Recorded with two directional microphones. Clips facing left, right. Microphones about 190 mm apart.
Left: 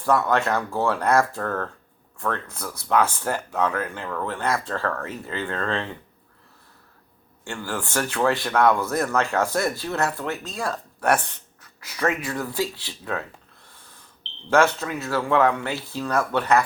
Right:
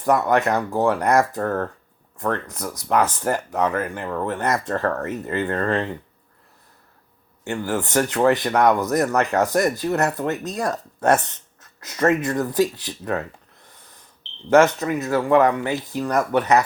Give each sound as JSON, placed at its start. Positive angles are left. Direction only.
{"t": 0.0, "sound": "speech", "side_deg": -15}
{"t": 7.4, "sound": "speech", "side_deg": -20}
{"t": 13.7, "sound": "owl", "side_deg": -20}
{"t": 14.5, "sound": "speech", "side_deg": -15}